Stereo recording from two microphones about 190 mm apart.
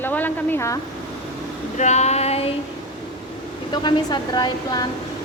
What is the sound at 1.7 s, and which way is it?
Female singing, 35° left (ahead or behind).